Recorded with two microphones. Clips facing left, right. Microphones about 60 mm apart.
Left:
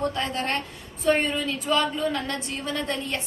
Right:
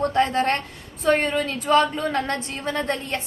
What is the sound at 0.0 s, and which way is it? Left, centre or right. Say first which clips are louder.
A woman's voice: right 7 dB; right.